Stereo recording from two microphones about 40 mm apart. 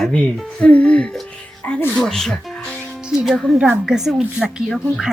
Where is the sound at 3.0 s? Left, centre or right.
Centre.